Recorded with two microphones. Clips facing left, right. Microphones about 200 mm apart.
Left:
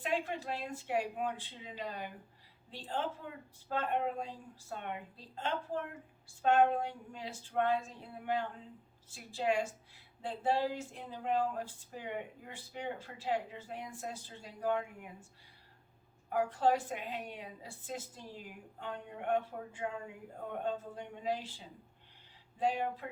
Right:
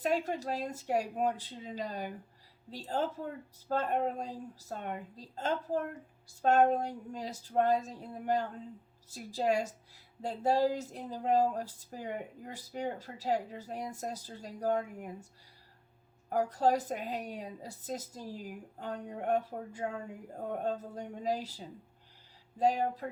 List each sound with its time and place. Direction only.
0.0 s a woman's voice: 40° right (ahead or behind)
16.3 s a woman's voice: 40° right (ahead or behind)